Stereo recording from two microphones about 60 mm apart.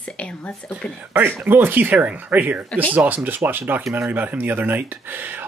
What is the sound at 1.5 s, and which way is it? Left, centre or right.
Speech, right.